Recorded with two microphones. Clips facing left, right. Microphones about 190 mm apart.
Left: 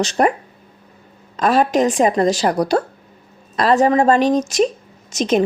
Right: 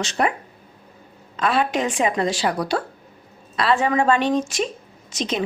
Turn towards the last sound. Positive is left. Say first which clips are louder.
# left 8 dB
turn(degrees=45)  # may be behind; listen again after turning